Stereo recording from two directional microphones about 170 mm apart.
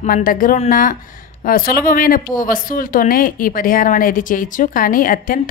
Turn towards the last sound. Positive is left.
turn(degrees=55)  # may be behind; listen again after turning